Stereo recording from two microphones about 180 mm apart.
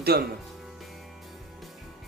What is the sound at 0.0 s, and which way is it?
Speech, 60° right (ahead or behind).